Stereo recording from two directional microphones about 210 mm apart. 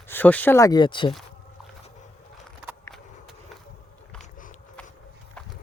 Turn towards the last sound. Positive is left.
turn(degrees=40)  # may be behind; listen again after turning